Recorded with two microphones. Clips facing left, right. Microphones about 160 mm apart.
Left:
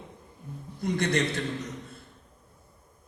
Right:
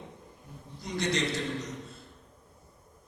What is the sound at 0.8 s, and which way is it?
Speech, 55° left (ahead or behind).